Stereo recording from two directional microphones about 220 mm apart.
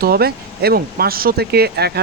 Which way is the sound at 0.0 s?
45° right (ahead or behind).